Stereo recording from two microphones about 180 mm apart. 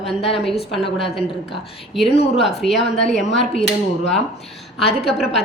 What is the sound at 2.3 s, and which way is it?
Speech, centre (ahead or behind).